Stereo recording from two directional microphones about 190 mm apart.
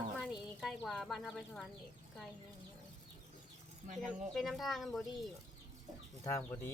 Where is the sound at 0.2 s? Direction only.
Centre (ahead or behind).